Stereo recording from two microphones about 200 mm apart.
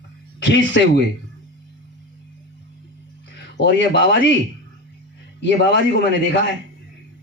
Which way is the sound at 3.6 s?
60° left (ahead or behind).